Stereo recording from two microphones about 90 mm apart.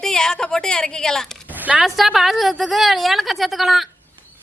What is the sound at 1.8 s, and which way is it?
A woman's voice, centre (ahead or behind).